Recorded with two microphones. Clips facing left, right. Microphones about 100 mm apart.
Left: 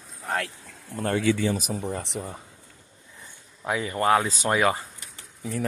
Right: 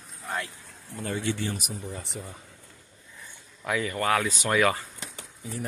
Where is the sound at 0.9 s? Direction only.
55° left (ahead or behind).